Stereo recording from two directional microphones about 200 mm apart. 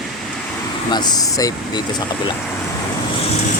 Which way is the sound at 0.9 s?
20° left (ahead or behind).